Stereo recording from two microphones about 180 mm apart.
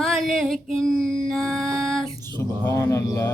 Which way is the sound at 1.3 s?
Centre (ahead or behind).